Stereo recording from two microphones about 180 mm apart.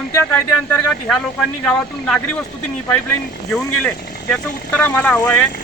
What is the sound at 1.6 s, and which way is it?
Speech, 5° left (ahead or behind).